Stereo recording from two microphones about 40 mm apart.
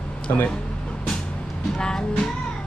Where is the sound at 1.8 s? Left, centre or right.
Centre.